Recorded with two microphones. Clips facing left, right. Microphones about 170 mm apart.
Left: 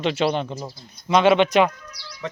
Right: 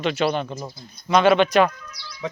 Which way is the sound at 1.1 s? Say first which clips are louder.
Even; 20° left (ahead or behind).